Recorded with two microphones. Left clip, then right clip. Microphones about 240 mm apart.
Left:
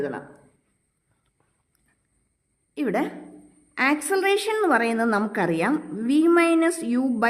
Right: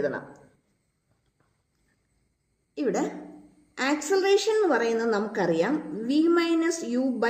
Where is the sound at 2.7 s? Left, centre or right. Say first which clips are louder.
Left 2 dB; left.